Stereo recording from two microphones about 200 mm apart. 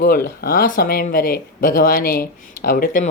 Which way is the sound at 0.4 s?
45° left (ahead or behind).